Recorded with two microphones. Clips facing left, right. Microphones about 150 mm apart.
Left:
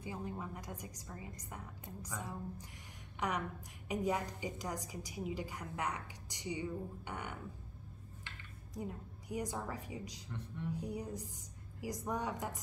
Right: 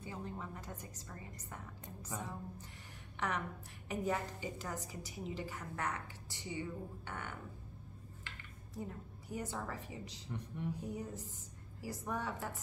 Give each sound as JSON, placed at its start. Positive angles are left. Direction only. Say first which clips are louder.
{"t": 0.0, "sound": "a woman's voice", "louder": "left 2 dB", "side_deg": 15}
{"t": 8.7, "sound": "a woman's voice", "louder": "left 1 dB", "side_deg": 15}
{"t": 10.3, "sound": "a man's voice", "louder": "right 2 dB", "side_deg": -15}
{"t": 10.8, "sound": "a woman's voice", "louder": "left 1 dB", "side_deg": 15}